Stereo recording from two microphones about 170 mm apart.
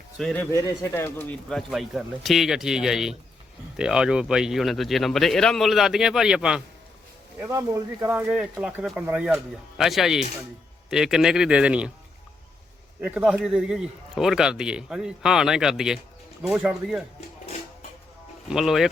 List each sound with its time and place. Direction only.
0.2 s a man's voice: 5° left (ahead or behind)
0.5 s a man's voice: 20° left (ahead or behind); by 6.6 s 5° right (ahead or behind)
7.3 s a man's voice: 15° right (ahead or behind)
13.0 s a man's voice: 5° right (ahead or behind)
17.2 s music: 40° left (ahead or behind)
18.4 s a man's voice: 5° right (ahead or behind)